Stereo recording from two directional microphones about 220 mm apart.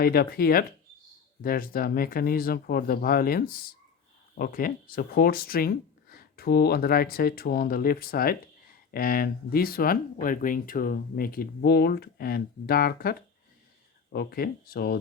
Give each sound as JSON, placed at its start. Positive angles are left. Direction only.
{"t": 0.0, "sound": "speech", "side_deg": 45}